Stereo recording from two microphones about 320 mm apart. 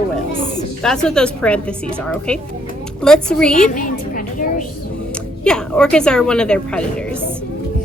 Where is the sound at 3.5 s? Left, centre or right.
Left.